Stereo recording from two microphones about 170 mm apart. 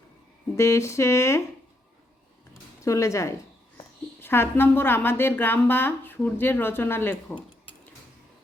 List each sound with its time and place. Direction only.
0.5 s a woman's voice: 15° left (ahead or behind)
2.8 s a woman's voice: 20° left (ahead or behind)